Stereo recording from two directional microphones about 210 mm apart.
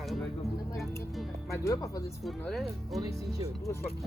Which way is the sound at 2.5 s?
Centre (ahead or behind).